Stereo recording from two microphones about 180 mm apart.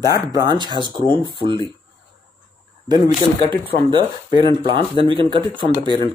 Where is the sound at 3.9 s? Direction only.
25° right (ahead or behind).